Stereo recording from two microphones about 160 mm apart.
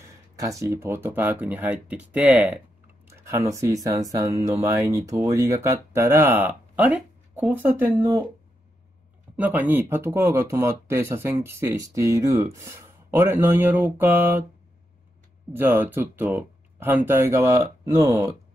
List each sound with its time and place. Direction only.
0.0 s speech: 20° right (ahead or behind)
3.1 s speech: 20° right (ahead or behind)
8.0 s speech: 25° right (ahead or behind)
9.4 s speech: 10° right (ahead or behind)
15.5 s speech: 10° right (ahead or behind)